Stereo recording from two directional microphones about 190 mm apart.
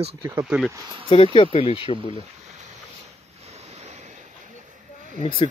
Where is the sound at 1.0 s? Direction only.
30° left (ahead or behind).